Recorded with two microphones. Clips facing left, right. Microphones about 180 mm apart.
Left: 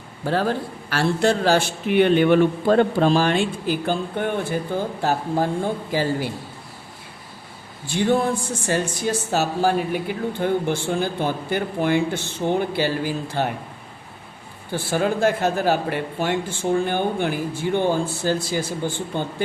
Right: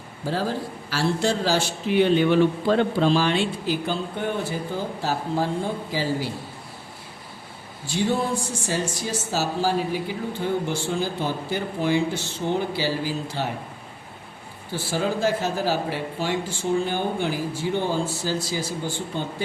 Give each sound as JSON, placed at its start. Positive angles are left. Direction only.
{"t": 0.3, "sound": "speech", "side_deg": 65}
{"t": 5.9, "sound": "a man's voice", "side_deg": 55}
{"t": 7.9, "sound": "speech", "side_deg": 55}
{"t": 14.7, "sound": "speech", "side_deg": 55}